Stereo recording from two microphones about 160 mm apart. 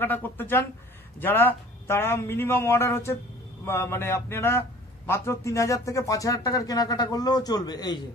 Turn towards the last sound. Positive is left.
turn(degrees=25)  # may be behind; listen again after turning